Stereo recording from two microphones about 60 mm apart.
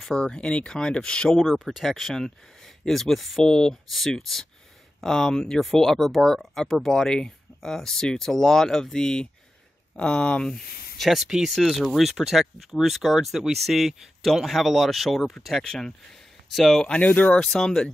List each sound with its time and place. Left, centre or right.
0.0 s speech: centre
1.5 s speech: centre
1.8 s speech: centre
10.5 s speech: centre
16.4 s speech: centre
16.8 s speech: centre
17.4 s speech: centre